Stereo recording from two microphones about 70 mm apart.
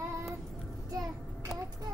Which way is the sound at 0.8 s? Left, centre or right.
Right.